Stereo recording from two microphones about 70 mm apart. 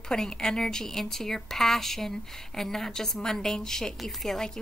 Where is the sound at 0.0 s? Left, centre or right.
Centre.